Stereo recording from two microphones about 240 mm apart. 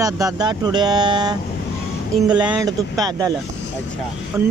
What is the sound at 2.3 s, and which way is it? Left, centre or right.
Speech, centre.